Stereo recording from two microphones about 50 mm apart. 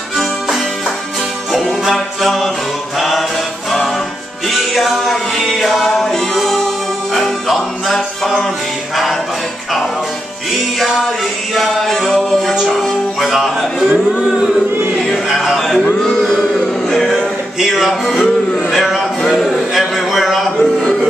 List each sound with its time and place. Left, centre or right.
1.5 s music: centre
4.5 s music: centre
11.5 s music: centre
13.2 s music: centre
14.1 s speech: centre
15.2 s music: centre
16.0 s a sound: centre
16.9 s music: centre
17.6 s music: centre
18.7 s a man's voice: centre
19.8 s a sound: centre